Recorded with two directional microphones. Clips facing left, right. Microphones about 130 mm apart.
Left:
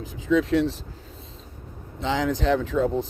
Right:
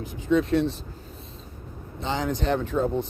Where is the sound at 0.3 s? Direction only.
90° left.